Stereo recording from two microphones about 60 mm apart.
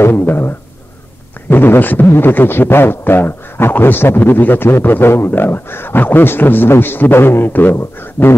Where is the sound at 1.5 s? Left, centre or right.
Left.